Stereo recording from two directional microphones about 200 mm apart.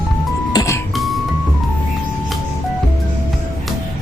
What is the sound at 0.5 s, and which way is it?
Music, 15° left (ahead or behind).